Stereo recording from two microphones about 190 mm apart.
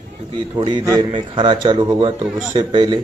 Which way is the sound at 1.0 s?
25° right (ahead or behind).